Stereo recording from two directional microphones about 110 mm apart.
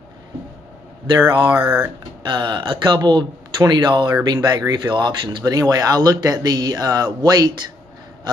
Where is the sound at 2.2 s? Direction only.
45° right (ahead or behind).